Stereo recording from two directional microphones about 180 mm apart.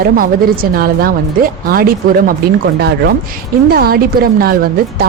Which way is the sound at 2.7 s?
65° right (ahead or behind).